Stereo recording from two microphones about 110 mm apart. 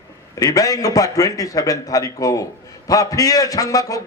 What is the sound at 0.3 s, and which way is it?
A man's voice, 35° left (ahead or behind).